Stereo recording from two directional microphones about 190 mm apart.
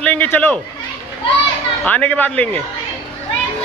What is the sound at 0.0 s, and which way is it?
Speech, 10° left (ahead or behind).